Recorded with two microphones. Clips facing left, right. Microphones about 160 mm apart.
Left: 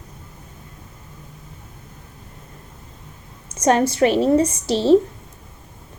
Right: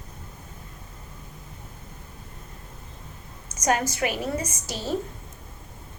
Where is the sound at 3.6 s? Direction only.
30° left (ahead or behind).